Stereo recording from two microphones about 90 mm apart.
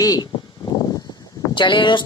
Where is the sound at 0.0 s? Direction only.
45° left (ahead or behind).